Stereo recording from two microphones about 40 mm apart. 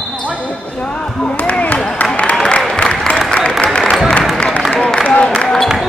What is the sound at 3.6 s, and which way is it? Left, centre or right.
Music, left.